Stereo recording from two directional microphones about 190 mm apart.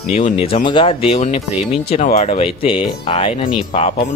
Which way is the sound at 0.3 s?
30° left (ahead or behind).